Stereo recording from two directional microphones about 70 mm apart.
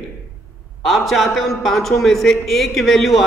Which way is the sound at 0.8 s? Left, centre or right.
Centre.